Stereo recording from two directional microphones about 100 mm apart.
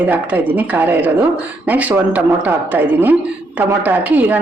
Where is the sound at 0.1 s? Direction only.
15° right (ahead or behind).